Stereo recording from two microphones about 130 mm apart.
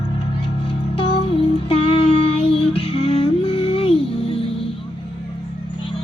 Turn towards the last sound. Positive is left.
turn(degrees=45)  # may be behind; listen again after turning